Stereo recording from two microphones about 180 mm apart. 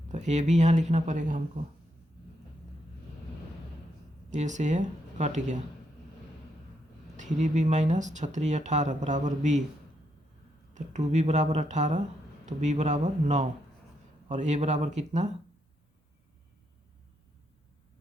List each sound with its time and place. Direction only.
0.1 s speech: 40° right (ahead or behind)
4.3 s speech: 40° right (ahead or behind)
7.2 s speech: 40° right (ahead or behind)
10.8 s speech: 40° right (ahead or behind)